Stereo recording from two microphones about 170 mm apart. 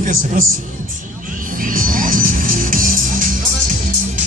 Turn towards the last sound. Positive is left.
turn(degrees=-55)  # may be behind; listen again after turning